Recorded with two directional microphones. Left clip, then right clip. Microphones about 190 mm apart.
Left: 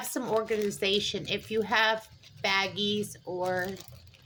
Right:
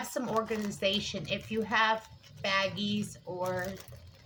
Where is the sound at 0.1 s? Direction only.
40° left (ahead or behind).